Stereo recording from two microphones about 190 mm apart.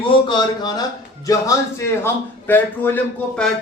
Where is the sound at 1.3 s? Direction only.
15° left (ahead or behind).